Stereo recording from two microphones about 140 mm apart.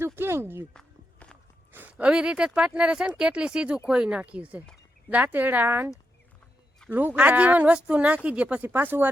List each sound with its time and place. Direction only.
0.0 s a sound: 15° right (ahead or behind)
0.7 s walk: 5° left (ahead or behind)
1.7 s a woman's voice: 10° right (ahead or behind)
6.9 s a woman's voice: 10° right (ahead or behind)